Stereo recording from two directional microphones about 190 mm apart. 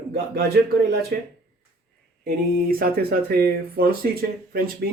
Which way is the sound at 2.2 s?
50° right (ahead or behind).